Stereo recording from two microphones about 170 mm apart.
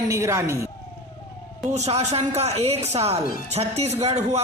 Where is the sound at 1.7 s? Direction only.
40° right (ahead or behind).